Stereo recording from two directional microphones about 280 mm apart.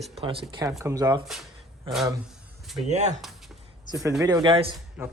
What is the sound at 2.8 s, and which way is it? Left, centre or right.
Speech, right.